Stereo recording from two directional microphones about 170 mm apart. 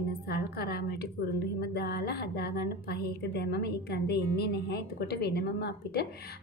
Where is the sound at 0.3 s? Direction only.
65° left (ahead or behind).